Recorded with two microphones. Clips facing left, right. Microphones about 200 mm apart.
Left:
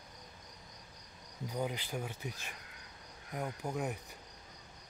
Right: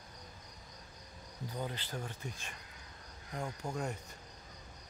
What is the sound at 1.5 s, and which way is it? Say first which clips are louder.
Speech: left 4 dB; 15° left (ahead or behind).